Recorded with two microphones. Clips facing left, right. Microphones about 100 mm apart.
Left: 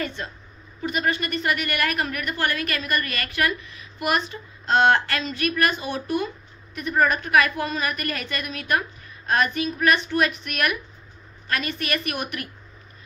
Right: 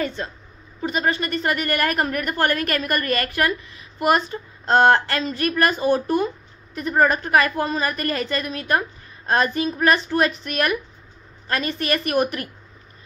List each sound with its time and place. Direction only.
0.0 s a woman's voice: 35° right (ahead or behind)